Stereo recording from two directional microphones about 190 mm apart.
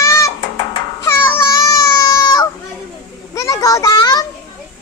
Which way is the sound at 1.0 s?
10° left (ahead or behind).